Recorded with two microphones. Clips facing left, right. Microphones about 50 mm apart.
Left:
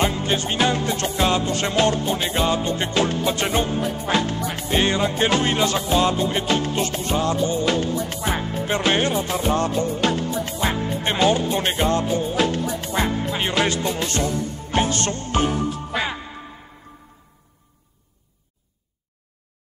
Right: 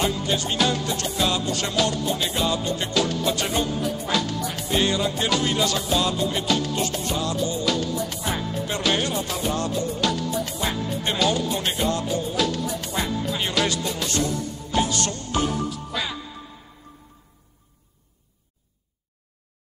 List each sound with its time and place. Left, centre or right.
0.0 s music: left